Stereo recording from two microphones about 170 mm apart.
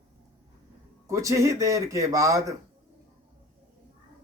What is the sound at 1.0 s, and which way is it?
A man's voice, 20° right (ahead or behind).